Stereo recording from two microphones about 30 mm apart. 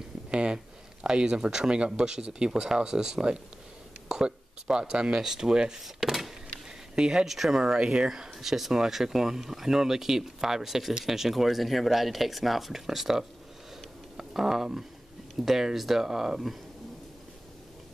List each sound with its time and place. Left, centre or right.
0.3 s speech: right
5.2 s speech: centre
5.5 s speech: right
6.0 s power windows: right
7.0 s speech: right
7.2 s speech: centre
7.6 s speech: right
8.3 s speech: centre